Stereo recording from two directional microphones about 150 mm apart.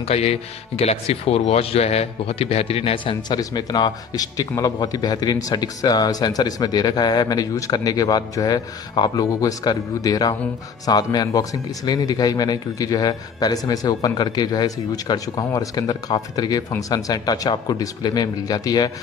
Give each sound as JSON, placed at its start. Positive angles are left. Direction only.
{"t": 0.0, "sound": "a man's voice", "side_deg": 45}